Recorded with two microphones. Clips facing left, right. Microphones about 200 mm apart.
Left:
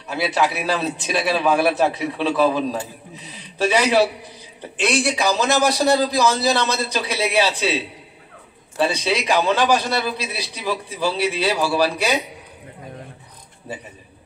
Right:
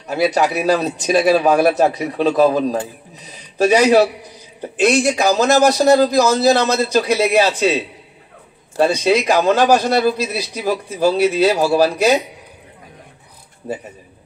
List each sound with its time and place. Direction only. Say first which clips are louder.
0.1 s a man's voice: right 5 dB; 45° right (ahead or behind)
13.7 s a man's voice: right 7 dB; 45° right (ahead or behind)